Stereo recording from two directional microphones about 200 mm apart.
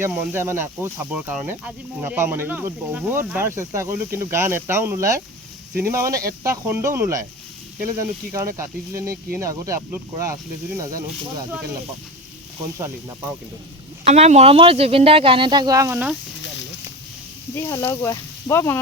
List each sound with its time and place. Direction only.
0.0 s speech: 10° right (ahead or behind)
14.0 s speech: 35° right (ahead or behind); by 16.1 s 10° right (ahead or behind)
17.5 s speech: 15° left (ahead or behind)